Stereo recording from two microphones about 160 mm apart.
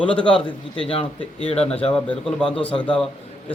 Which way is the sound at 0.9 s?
35° left (ahead or behind).